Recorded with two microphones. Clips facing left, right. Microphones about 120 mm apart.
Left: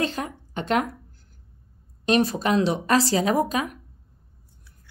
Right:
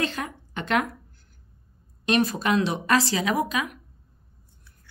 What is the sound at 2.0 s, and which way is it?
Speech, 35° left (ahead or behind).